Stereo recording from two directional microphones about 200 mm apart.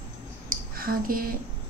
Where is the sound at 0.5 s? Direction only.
45° right (ahead or behind).